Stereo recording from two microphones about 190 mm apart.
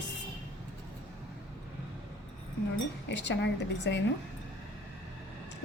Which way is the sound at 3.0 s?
70° left (ahead or behind).